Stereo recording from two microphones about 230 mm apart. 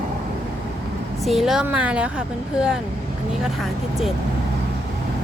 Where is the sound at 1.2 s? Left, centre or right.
Centre.